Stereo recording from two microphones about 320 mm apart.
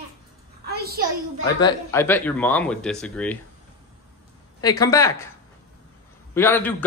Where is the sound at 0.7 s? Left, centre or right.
Right.